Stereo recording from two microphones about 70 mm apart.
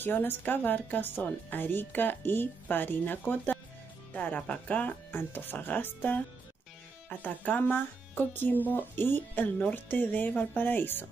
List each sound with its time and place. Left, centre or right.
0.0 s speech: left